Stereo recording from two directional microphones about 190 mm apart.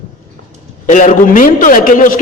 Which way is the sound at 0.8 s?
45° left (ahead or behind).